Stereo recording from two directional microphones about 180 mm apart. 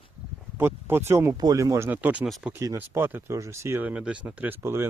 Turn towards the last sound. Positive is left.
turn(degrees=-10)  # may be behind; listen again after turning